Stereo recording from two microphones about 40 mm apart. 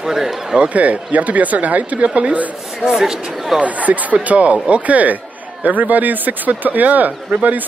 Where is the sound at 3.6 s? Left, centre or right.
Right.